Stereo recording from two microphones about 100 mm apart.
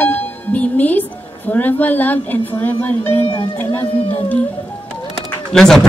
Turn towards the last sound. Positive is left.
turn(degrees=5)  # may be behind; listen again after turning